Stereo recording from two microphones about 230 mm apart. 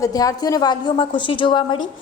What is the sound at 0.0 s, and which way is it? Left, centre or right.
A woman's voice, centre.